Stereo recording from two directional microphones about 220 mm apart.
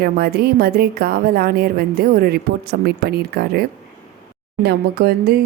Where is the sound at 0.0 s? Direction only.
45° right (ahead or behind).